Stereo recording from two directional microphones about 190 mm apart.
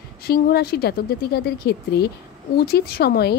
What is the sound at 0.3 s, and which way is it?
A woman's voice, 55° left (ahead or behind).